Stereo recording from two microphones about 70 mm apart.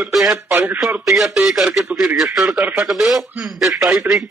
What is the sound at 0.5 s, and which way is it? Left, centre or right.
Speech, right.